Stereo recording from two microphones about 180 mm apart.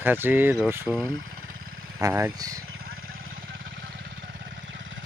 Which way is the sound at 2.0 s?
15° right (ahead or behind).